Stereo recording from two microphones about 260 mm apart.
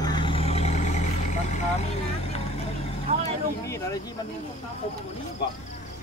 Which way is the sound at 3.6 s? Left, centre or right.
Centre.